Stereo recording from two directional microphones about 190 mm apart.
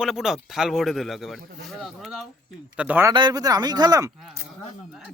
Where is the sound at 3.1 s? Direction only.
20° right (ahead or behind).